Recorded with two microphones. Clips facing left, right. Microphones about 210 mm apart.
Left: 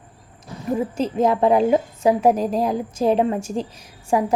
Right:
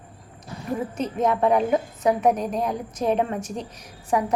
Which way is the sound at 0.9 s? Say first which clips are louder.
Left 3 dB; 30° left (ahead or behind).